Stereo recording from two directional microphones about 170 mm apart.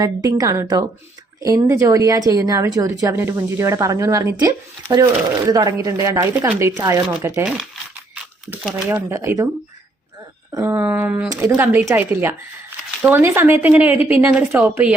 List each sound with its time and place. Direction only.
0.0 s speech: 20° right (ahead or behind)
10.5 s speech: 20° right (ahead or behind)